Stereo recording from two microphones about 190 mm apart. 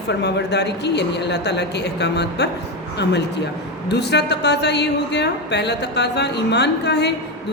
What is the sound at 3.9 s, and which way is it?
A woman's voice, 60° left (ahead or behind).